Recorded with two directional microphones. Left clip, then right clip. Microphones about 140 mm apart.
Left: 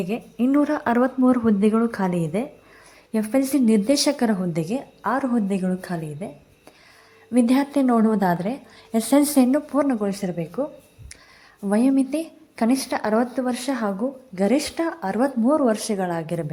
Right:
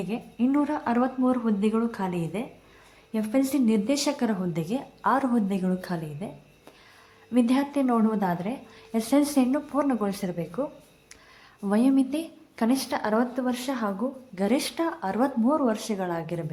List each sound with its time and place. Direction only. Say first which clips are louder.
0.0 s a woman's voice: left 4 dB; 25° left (ahead or behind)
4.8 s a woman's voice: right 3 dB; 10° left (ahead or behind)
7.3 s a woman's voice: left 4 dB; 25° left (ahead or behind)